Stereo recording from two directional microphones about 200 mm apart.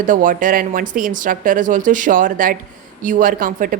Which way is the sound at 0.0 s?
40° right (ahead or behind).